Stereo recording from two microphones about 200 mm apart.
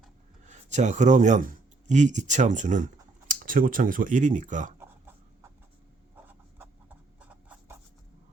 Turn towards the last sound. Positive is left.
turn(degrees=-10)  # may be behind; listen again after turning